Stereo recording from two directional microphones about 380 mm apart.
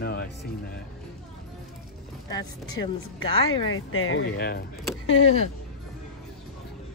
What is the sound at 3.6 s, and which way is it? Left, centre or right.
Speech, left.